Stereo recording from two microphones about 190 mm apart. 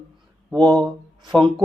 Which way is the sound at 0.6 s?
20° right (ahead or behind).